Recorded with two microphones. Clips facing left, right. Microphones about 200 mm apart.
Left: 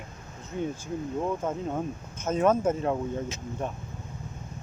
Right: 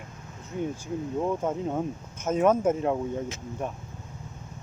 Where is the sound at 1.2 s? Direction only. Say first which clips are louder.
Right 3 dB; 15° right (ahead or behind).